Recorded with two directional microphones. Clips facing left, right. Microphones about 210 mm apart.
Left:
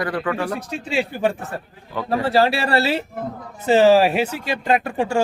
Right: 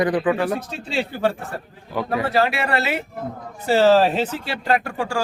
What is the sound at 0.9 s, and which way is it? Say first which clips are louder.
Speech: left 1 dB; 15° left (ahead or behind).